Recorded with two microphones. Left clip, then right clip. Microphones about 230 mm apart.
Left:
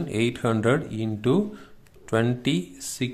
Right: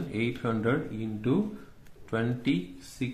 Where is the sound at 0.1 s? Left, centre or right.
Left.